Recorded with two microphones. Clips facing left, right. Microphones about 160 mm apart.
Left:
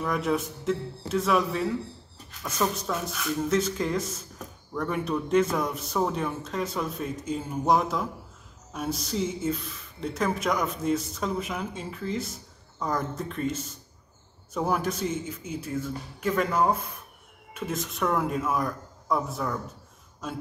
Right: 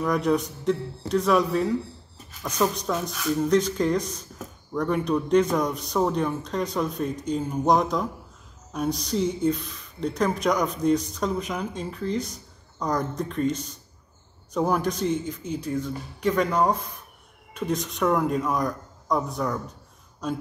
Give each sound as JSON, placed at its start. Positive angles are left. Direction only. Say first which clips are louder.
{"t": 0.1, "sound": "speech", "louder": "right 4 dB", "side_deg": 5}
{"t": 2.4, "sound": "a woman's voice", "louder": "right 3 dB", "side_deg": -15}
{"t": 3.1, "sound": "speech", "louder": "right 5 dB", "side_deg": 5}
{"t": 12.7, "sound": "speech", "louder": "right 3 dB", "side_deg": -15}
{"t": 13.1, "sound": "speech", "louder": "right 4 dB", "side_deg": 5}
{"t": 14.7, "sound": "a man's voice", "louder": "right 2 dB", "side_deg": 5}